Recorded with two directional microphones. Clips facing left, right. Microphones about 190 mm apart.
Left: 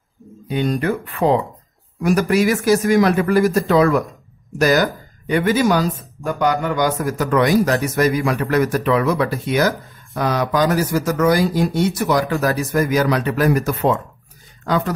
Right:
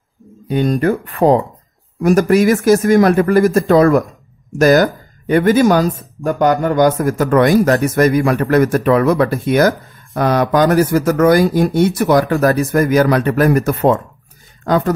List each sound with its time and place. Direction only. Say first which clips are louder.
0.5 s a man's voice: right 5 dB; 45° right (ahead or behind)